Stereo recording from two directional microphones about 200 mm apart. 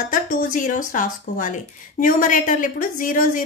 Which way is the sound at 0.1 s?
40° left (ahead or behind).